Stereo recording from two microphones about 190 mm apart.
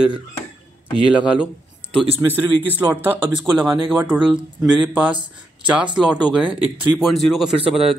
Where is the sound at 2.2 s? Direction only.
10° right (ahead or behind).